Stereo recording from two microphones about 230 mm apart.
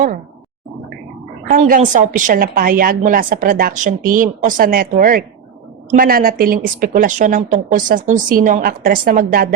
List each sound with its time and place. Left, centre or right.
1.5 s a woman's voice: right